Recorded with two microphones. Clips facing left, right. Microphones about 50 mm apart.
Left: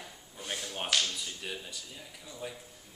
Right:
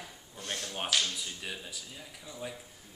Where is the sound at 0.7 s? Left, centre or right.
Centre.